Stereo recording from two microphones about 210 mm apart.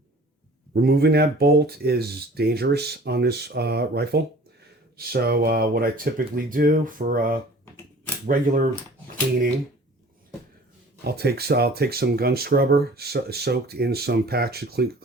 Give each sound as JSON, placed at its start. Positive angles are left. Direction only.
{"t": 0.7, "sound": "speech", "side_deg": -50}
{"t": 11.0, "sound": "speech", "side_deg": -50}